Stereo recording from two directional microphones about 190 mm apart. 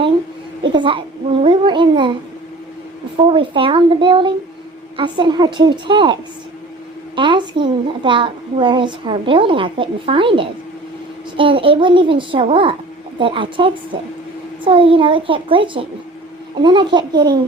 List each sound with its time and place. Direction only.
0.6 s a woman's voice: 25° right (ahead or behind)
3.2 s a woman's voice: 25° right (ahead or behind)
7.2 s a woman's voice: 25° right (ahead or behind)